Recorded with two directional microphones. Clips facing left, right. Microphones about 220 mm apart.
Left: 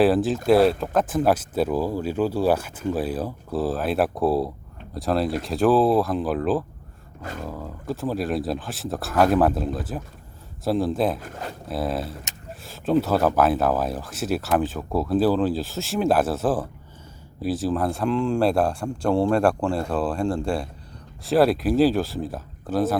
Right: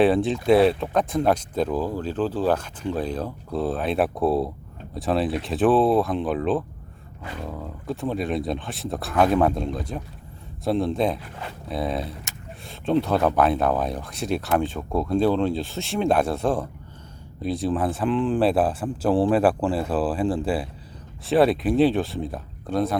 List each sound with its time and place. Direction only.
0.0 s speech: centre (ahead or behind)
7.2 s speech: 45° left (ahead or behind)
7.4 s speech: centre (ahead or behind)
11.2 s speech: 45° left (ahead or behind)
11.7 s speech: centre (ahead or behind)